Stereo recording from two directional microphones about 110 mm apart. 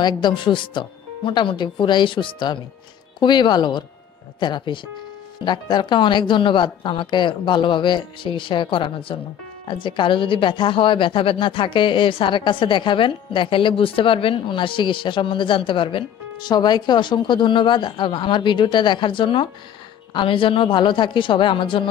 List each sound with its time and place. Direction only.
0.0 s speech: 45° left (ahead or behind)